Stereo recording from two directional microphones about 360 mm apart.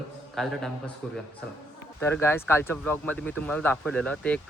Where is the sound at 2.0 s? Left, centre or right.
Centre.